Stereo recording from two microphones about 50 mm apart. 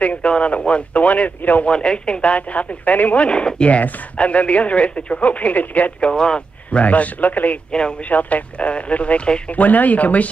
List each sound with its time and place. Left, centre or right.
0.0 s speech: left
1.7 s speech: centre
3.3 s speech: centre
5.9 s speech: centre
9.6 s speech: left